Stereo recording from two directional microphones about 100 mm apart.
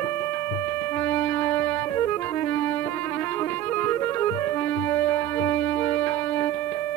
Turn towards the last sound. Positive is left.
turn(degrees=25)  # may be behind; listen again after turning